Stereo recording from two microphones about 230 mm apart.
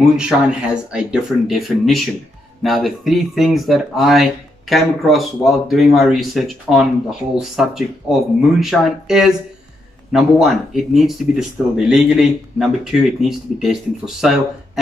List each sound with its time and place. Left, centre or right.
0.1 s speech: centre